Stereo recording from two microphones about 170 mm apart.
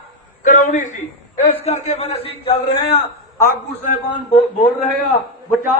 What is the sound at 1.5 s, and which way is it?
Speech, 35° left (ahead or behind).